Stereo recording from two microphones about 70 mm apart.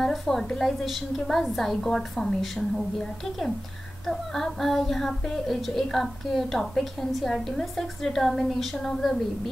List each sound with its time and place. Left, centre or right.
0.0 s speech: centre
4.1 s speech: centre